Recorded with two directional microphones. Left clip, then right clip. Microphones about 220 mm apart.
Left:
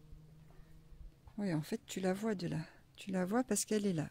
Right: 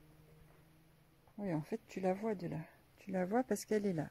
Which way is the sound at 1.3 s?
Centre (ahead or behind).